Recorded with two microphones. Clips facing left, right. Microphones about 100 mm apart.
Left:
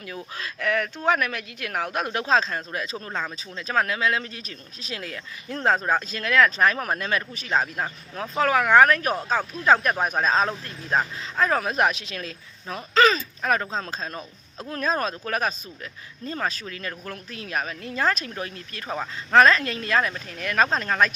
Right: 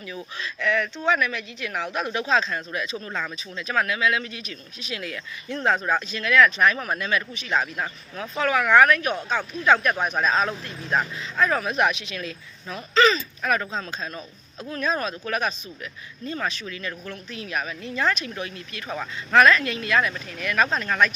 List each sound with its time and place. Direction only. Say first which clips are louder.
0.0 s speech: right 1 dB; 45° left (ahead or behind)
3.1 s speech: even; 30° left (ahead or behind)